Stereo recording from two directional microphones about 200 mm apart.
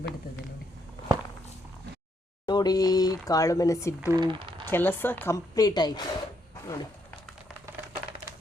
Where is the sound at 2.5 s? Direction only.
20° left (ahead or behind).